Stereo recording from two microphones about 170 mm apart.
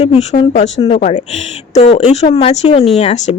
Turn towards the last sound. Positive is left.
turn(degrees=40)  # may be behind; listen again after turning